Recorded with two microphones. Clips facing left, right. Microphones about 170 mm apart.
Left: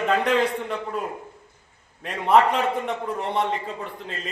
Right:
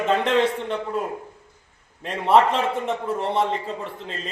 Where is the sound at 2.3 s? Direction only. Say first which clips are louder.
Right 1 dB; 30° right (ahead or behind).